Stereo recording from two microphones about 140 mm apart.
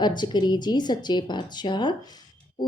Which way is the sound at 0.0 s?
30° left (ahead or behind).